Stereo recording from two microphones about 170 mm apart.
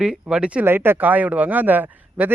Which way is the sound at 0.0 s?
5° right (ahead or behind).